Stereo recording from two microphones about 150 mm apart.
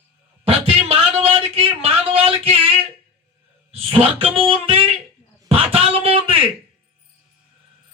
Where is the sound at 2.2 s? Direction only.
40° right (ahead or behind).